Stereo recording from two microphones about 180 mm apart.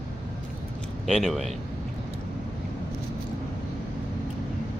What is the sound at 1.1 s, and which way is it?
Speech, centre (ahead or behind).